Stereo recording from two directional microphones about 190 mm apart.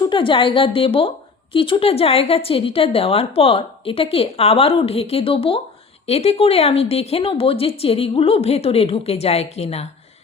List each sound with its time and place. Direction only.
0.0 s a woman's voice: 25° left (ahead or behind)